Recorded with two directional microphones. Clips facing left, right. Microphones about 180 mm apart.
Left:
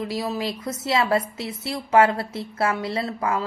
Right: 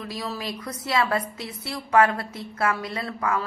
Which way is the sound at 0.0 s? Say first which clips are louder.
Left 6 dB; 25° left (ahead or behind).